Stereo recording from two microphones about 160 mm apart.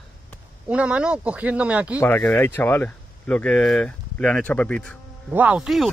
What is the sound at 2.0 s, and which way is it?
Speech, 10° left (ahead or behind).